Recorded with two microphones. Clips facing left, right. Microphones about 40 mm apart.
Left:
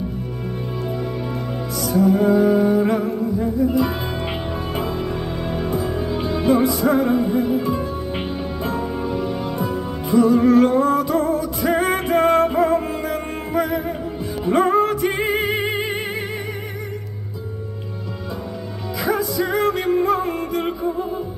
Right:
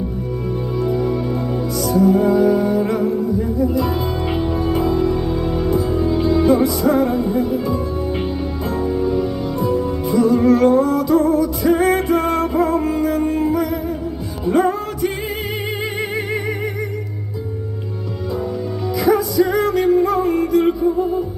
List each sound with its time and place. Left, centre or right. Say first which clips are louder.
0.9 s music: right 6 dB; centre
6.7 s music: right 1 dB; centre
8.7 s music: right 7 dB; left
10.1 s music: even; centre
13.0 s music: right 8 dB; left
19.0 s music: right 5 dB; centre
19.5 s music: right 1 dB; left